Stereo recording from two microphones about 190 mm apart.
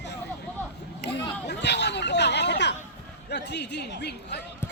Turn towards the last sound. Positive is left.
turn(degrees=60)  # may be behind; listen again after turning